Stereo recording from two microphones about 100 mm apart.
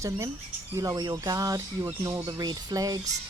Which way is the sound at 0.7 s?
40° right (ahead or behind).